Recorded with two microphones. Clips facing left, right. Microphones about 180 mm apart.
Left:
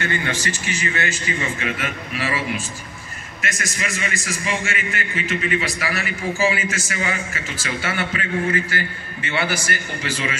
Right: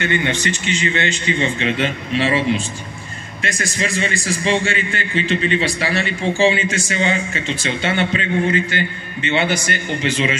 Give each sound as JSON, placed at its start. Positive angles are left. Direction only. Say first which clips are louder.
{"t": 0.0, "sound": "a man's voice", "louder": "right 4 dB", "side_deg": -25}